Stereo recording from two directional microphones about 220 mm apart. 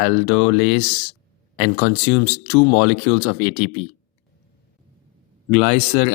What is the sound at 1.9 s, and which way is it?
Speech, 25° left (ahead or behind).